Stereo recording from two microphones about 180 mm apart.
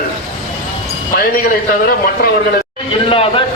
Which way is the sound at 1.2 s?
50° left (ahead or behind).